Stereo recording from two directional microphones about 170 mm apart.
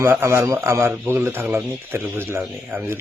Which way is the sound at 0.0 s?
15° right (ahead or behind).